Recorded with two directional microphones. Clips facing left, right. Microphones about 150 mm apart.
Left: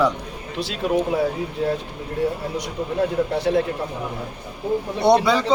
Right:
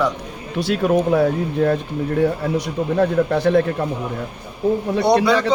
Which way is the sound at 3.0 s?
65° right (ahead or behind).